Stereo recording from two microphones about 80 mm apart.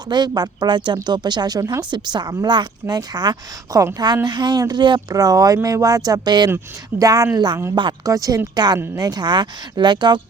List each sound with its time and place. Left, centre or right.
0.1 s speech: right
1.9 s speech: right
4.7 s speech: right
5.0 s speech: right
7.0 s speech: right
7.3 s speech: right
8.0 s speech: right
8.5 s speech: right